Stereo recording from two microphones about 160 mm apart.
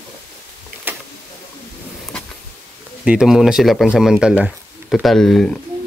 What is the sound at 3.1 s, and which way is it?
Speech, 5° right (ahead or behind).